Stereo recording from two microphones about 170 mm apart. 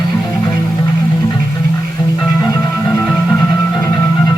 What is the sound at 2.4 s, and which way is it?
Music, 20° left (ahead or behind).